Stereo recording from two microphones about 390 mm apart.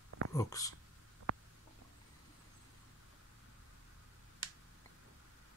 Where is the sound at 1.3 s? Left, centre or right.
Right.